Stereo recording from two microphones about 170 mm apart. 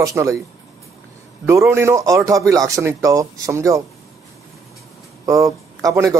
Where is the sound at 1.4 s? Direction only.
15° right (ahead or behind).